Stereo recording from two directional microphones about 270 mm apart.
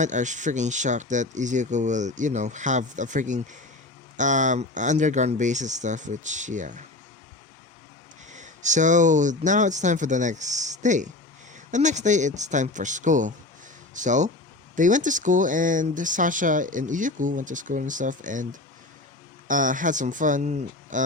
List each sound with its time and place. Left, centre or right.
0.0 s speech: right
8.3 s speech: right
19.5 s speech: right